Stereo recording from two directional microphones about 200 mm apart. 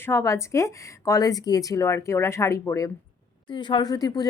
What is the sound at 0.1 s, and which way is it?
Speech, 15° left (ahead or behind).